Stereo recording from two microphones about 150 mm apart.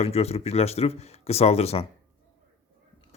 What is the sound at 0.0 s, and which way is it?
Speech, 45° left (ahead or behind).